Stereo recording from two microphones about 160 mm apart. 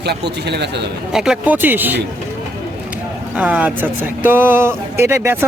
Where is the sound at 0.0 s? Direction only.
90° right.